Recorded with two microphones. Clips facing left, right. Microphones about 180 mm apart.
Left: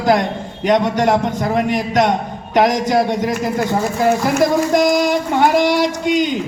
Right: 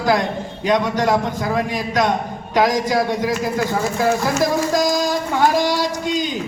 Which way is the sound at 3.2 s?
55° left (ahead or behind).